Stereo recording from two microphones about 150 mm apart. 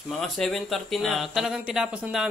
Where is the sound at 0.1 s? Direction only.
Centre (ahead or behind).